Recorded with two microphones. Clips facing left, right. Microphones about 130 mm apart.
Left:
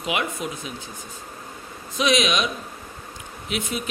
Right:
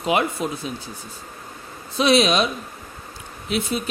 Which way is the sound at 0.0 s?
35° right (ahead or behind).